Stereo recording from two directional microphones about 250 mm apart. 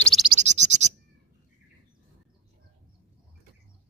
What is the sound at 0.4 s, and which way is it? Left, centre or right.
Bird, right.